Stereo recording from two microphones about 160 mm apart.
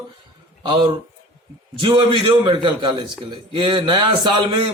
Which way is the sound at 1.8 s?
30° right (ahead or behind).